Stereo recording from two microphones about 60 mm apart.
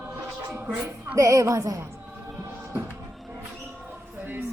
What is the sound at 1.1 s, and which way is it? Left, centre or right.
Speech, right.